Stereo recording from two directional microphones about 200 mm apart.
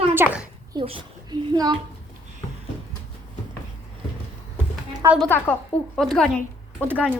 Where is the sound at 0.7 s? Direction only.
25° right (ahead or behind).